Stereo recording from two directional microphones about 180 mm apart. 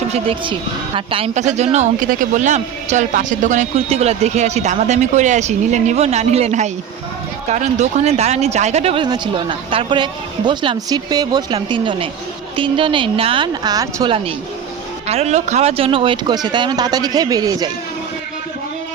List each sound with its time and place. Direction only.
0.1 s speech: 30° right (ahead or behind)
15.0 s speech: 35° right (ahead or behind); by 17.7 s 20° right (ahead or behind)